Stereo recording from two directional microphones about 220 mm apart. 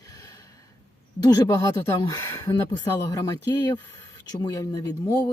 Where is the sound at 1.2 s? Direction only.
15° left (ahead or behind).